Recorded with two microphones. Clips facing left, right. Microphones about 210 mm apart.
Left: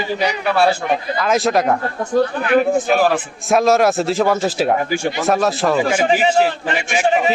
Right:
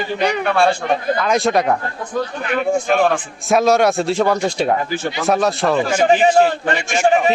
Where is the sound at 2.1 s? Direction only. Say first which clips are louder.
Left 7 dB; 50° left (ahead or behind).